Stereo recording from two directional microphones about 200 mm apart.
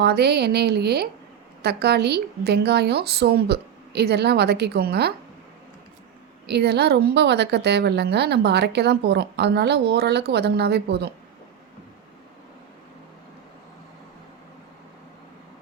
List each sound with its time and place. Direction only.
0.0 s a woman's voice: 55° right (ahead or behind)
6.5 s a woman's voice: 55° right (ahead or behind)